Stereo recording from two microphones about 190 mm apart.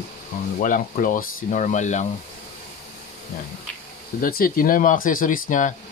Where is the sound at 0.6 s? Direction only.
45° left (ahead or behind).